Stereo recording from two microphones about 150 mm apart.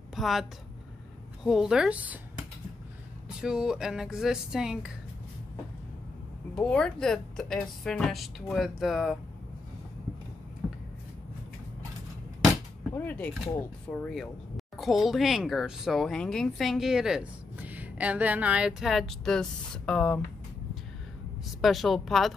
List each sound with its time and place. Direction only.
0.1 s a woman's voice: centre (ahead or behind)
6.5 s speech: 5° left (ahead or behind)
12.9 s speech: 10° left (ahead or behind)
21.5 s speech: centre (ahead or behind)